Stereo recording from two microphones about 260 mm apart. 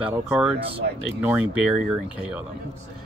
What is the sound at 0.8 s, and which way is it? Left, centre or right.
Speech, right.